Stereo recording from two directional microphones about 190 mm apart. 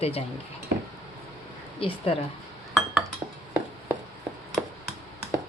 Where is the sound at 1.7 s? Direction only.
30° left (ahead or behind).